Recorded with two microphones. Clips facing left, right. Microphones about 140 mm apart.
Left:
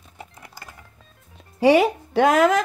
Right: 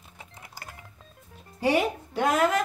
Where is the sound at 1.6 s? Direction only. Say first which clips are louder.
Left 8 dB; 90° left.